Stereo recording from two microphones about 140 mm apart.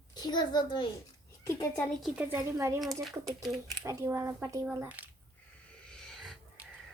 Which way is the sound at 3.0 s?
Centre (ahead or behind).